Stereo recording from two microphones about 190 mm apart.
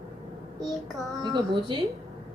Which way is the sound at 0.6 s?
Centre (ahead or behind).